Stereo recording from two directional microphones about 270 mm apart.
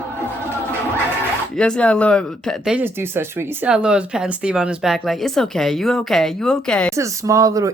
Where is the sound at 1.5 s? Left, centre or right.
Centre.